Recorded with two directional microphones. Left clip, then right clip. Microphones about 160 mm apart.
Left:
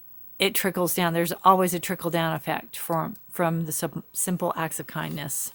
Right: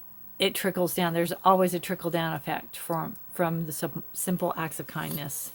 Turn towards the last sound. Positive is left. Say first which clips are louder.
# left 3 dB
turn(degrees=40)  # may be behind; listen again after turning